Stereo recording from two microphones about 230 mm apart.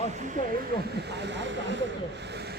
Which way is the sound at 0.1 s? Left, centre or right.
Right.